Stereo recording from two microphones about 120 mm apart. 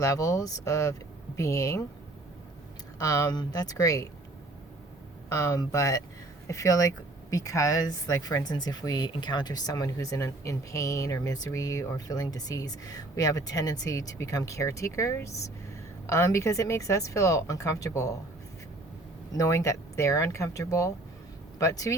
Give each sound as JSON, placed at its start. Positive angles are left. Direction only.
{"t": 0.0, "sound": "speech", "side_deg": 30}
{"t": 3.0, "sound": "speech", "side_deg": 30}
{"t": 5.3, "sound": "speech", "side_deg": 30}
{"t": 19.3, "sound": "speech", "side_deg": 25}